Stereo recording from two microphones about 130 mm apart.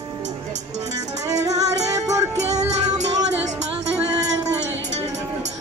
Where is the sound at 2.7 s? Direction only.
60° right (ahead or behind).